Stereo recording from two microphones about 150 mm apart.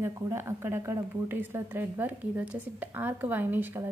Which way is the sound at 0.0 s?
15° right (ahead or behind).